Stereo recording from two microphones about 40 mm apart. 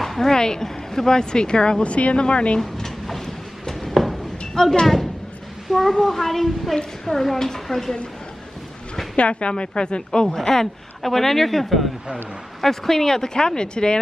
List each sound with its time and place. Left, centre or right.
0.0 s a sound: centre
0.3 s speech: centre
2.6 s drawer open or close: centre
5.7 s speech: centre
9.1 s speech: left
10.2 s speech: centre